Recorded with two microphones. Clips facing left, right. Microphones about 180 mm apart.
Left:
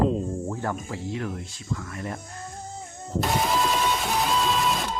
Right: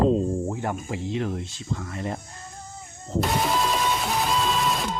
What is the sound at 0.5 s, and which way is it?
Speech, 20° right (ahead or behind).